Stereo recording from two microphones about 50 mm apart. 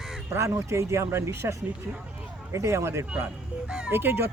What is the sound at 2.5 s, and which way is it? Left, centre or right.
Speech, right.